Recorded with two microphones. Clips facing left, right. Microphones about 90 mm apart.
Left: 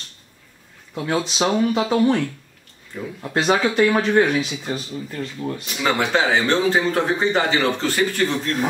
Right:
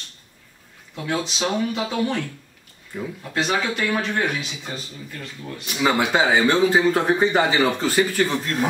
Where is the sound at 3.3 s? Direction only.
35° left (ahead or behind).